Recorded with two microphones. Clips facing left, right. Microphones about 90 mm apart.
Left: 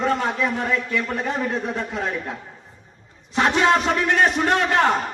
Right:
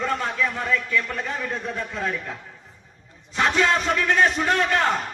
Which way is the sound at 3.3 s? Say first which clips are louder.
Left 3 dB; 50° left (ahead or behind).